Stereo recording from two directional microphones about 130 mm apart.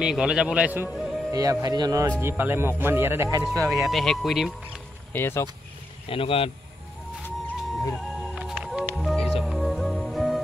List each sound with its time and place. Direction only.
0.0 s a man's voice: 5° right (ahead or behind)
1.3 s speech: 25° right (ahead or behind)
2.1 s a man's voice: 15° right (ahead or behind)
3.6 s speech: centre (ahead or behind)
5.1 s speech: 20° left (ahead or behind)
6.0 s speech: 45° left (ahead or behind)
7.2 s music: 15° left (ahead or behind)
7.9 s music: centre (ahead or behind)